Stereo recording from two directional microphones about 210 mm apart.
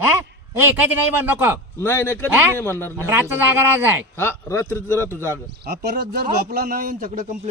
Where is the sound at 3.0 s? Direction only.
10° right (ahead or behind).